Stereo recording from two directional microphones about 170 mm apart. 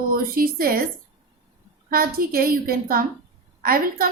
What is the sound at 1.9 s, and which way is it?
A woman's voice, 60° right (ahead or behind).